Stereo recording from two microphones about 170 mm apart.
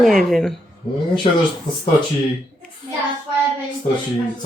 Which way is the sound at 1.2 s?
35° left (ahead or behind).